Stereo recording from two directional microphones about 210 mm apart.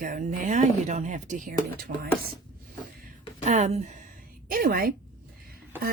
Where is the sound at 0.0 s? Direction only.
40° right (ahead or behind).